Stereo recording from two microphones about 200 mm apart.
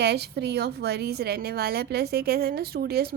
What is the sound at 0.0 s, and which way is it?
A woman's voice, 55° right (ahead or behind).